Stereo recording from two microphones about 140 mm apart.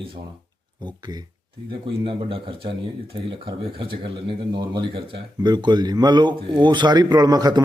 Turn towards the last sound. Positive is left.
turn(degrees=-30)  # may be behind; listen again after turning